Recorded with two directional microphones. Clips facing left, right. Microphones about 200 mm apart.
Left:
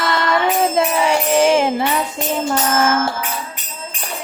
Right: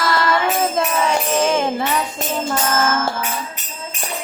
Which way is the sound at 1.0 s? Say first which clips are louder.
Left 5 dB; 30° left (ahead or behind).